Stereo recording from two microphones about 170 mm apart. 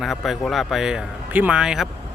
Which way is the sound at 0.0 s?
Centre (ahead or behind).